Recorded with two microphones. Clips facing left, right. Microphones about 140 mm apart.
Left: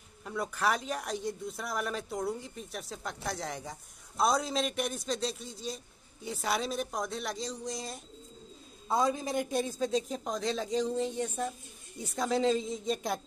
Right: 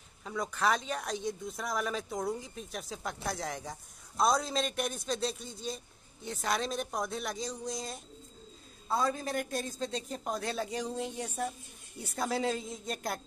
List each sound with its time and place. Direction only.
0.2 s speech: centre (ahead or behind)
8.8 s a man's voice: 20° left (ahead or behind)
9.7 s a woman's voice: 5° left (ahead or behind)